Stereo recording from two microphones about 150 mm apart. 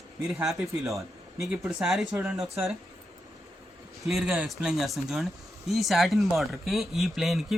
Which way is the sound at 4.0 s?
5° right (ahead or behind).